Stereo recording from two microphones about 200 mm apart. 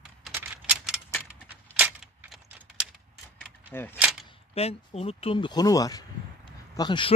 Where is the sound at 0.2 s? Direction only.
10° right (ahead or behind).